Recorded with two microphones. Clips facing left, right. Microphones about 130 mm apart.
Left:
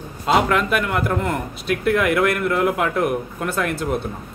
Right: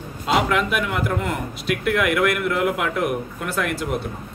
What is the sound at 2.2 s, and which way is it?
Speech, 30° left (ahead or behind).